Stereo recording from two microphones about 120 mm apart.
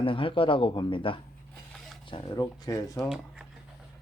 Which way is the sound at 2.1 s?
35° left (ahead or behind).